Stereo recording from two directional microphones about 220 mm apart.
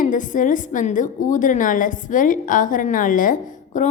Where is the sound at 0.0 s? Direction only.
35° left (ahead or behind).